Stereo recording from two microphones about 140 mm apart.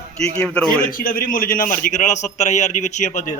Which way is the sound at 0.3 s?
5° left (ahead or behind).